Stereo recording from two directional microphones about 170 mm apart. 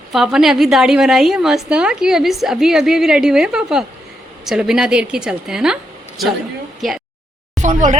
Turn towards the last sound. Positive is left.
turn(degrees=-45)  # may be behind; listen again after turning